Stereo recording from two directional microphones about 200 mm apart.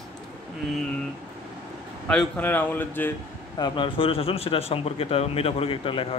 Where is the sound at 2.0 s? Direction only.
5° left (ahead or behind).